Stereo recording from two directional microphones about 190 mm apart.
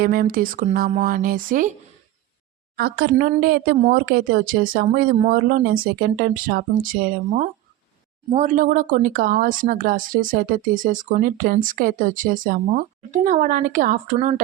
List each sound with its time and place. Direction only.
0.0 s speech: 50° right (ahead or behind)
2.7 s speech: 55° right (ahead or behind)
8.3 s speech: 40° right (ahead or behind)